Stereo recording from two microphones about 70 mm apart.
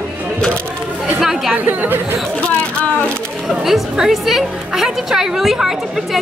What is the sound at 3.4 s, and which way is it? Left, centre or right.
A woman's voice, centre.